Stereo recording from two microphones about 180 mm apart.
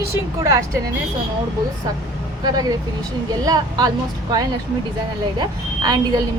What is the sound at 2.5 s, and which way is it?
Speech, 20° right (ahead or behind).